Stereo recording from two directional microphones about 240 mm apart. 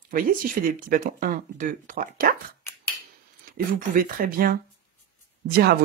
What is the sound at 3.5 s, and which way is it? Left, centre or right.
Speech, right.